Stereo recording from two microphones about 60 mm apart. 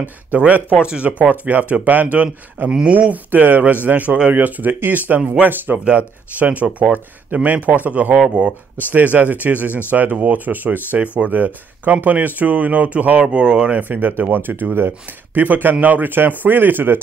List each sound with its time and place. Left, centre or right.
0.3 s a man's voice: right